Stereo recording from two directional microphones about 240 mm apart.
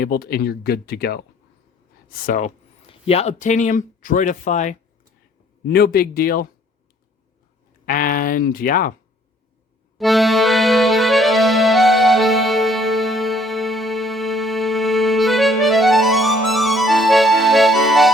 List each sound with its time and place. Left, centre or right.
0.0 s speech: left
7.9 s speech: left
10.0 s accordion: centre